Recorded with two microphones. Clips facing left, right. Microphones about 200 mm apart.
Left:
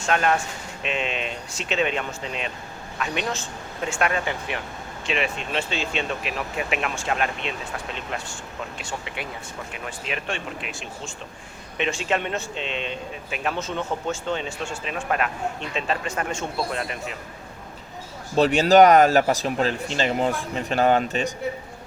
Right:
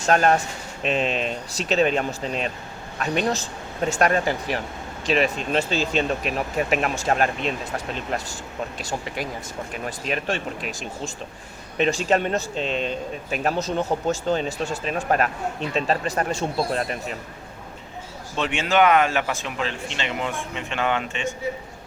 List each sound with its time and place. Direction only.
0.0 s speech: 40° right (ahead or behind)
8.8 s speech: 40° right (ahead or behind)
18.3 s speech: 35° left (ahead or behind)